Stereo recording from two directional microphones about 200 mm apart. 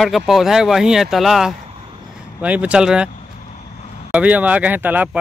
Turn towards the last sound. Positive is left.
turn(degrees=-10)  # may be behind; listen again after turning